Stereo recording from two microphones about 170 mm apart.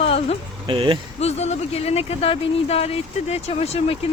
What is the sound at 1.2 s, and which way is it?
Speech, 40° left (ahead or behind).